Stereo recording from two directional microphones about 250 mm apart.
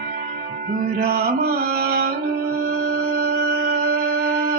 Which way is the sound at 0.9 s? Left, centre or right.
Right.